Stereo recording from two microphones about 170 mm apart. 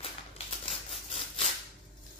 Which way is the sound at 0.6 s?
35° left (ahead or behind).